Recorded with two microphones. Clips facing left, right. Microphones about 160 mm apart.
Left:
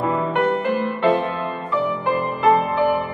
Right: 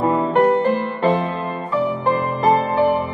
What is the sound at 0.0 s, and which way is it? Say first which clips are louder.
Music: right 4 dB; 30° right (ahead or behind).